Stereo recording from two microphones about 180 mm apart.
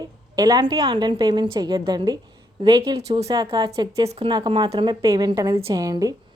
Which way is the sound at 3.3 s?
20° right (ahead or behind).